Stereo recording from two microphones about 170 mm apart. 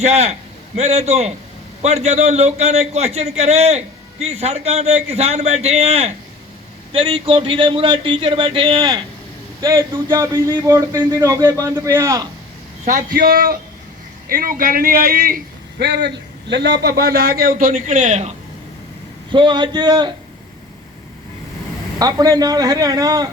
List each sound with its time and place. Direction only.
0.0 s a man's voice: 40° right (ahead or behind); by 12.3 s 20° right (ahead or behind)
13.1 s a man's voice: 60° right (ahead or behind)
15.8 s a man's voice: 80° right; by 18.3 s 45° right (ahead or behind)
19.3 s speech: 25° right (ahead or behind)
21.9 s speech: 20° right (ahead or behind)